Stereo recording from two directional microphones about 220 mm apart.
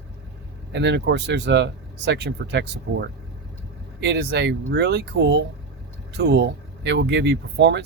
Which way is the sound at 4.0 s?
50° right (ahead or behind).